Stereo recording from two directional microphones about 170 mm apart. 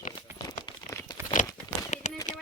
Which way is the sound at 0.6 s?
25° left (ahead or behind).